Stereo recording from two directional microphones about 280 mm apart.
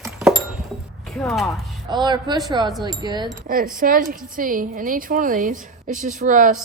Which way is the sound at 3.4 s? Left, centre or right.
Right.